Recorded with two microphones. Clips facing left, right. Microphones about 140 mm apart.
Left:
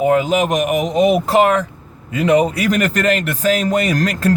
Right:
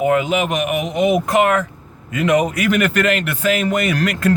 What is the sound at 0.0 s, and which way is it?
A man's voice, 35° left (ahead or behind).